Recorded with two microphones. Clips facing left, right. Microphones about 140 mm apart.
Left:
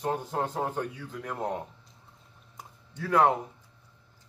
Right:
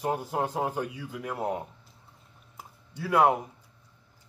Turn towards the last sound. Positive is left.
turn(degrees=-10)  # may be behind; listen again after turning